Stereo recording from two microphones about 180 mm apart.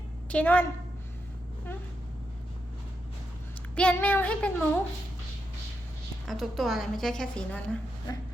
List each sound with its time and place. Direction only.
0.3 s child singing: 10° left (ahead or behind)
3.8 s child singing: 5° left (ahead or behind)
6.2 s a woman's voice: centre (ahead or behind)